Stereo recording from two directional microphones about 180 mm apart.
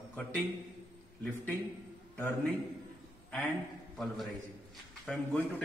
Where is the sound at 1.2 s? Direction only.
10° left (ahead or behind).